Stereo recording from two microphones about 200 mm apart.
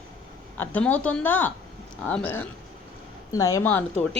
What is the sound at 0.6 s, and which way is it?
A woman's voice, 10° left (ahead or behind).